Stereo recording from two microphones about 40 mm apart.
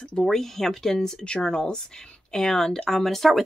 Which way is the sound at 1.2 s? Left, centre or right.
Left.